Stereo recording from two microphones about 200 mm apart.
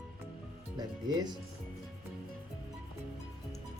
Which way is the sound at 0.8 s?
20° right (ahead or behind).